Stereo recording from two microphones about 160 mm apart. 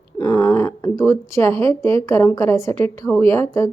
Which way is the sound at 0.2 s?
15° left (ahead or behind).